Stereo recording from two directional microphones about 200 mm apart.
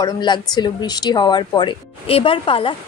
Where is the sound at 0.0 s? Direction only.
20° left (ahead or behind).